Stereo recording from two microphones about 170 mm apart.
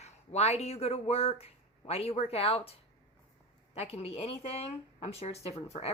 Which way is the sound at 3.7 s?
35° left (ahead or behind).